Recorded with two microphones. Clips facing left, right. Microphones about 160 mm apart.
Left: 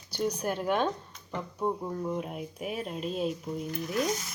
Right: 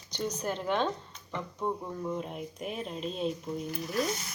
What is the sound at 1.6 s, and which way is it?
Speech, 10° left (ahead or behind).